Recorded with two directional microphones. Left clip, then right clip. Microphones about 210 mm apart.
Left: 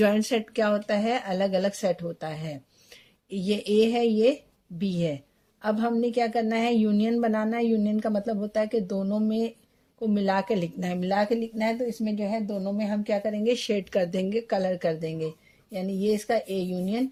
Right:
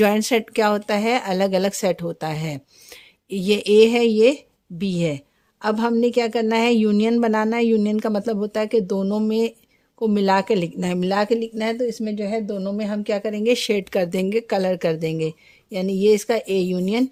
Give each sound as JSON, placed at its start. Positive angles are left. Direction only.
{"t": 0.0, "sound": "a woman's voice", "side_deg": -35}